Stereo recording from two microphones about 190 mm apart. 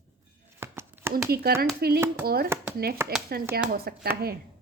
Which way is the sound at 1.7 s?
55° right (ahead or behind).